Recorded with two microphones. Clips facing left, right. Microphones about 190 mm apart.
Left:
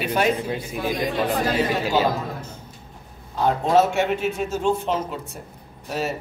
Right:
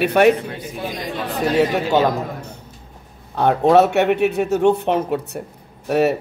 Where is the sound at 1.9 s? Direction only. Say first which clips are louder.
Right 4 dB; 65° right (ahead or behind).